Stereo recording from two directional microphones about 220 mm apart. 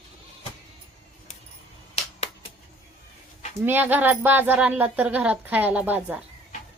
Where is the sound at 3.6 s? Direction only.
10° right (ahead or behind).